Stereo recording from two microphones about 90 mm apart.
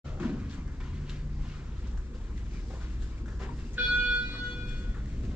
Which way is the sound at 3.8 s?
15° right (ahead or behind).